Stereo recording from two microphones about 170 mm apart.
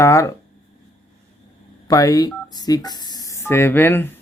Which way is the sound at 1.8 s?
20° left (ahead or behind).